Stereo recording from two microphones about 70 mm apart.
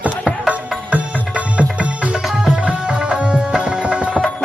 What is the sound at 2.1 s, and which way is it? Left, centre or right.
Music, centre.